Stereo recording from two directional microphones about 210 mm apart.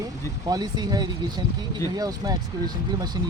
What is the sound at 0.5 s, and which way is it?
Speech, 20° right (ahead or behind).